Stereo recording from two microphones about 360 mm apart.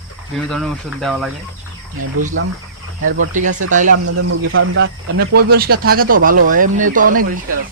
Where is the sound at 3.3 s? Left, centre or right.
Right.